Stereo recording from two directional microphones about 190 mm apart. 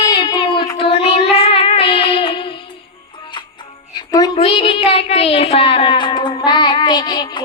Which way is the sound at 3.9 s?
20° left (ahead or behind).